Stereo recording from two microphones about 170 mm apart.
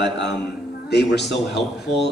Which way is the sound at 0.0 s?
90° left.